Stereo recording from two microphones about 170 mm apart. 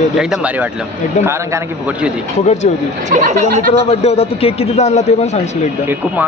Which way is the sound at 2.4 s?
45° left (ahead or behind).